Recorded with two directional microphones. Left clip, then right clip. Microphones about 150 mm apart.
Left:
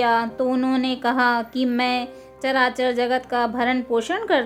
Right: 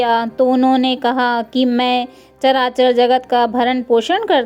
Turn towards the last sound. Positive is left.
turn(degrees=-40)  # may be behind; listen again after turning